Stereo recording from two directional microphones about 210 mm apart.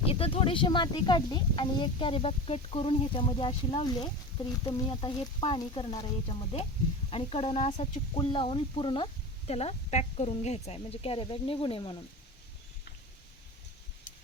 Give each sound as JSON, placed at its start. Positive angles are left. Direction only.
{"t": 0.0, "sound": "speech", "side_deg": 25}